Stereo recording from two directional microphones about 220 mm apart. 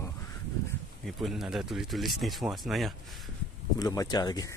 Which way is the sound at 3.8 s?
15° left (ahead or behind).